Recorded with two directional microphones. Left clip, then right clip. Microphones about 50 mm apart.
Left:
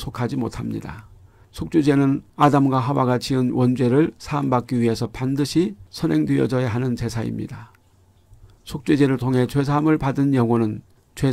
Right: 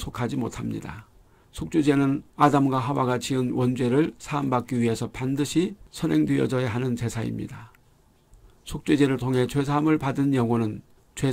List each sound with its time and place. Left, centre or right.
0.1 s speech: left
8.9 s speech: left